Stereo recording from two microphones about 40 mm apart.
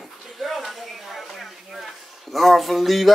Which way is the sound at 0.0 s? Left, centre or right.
Centre.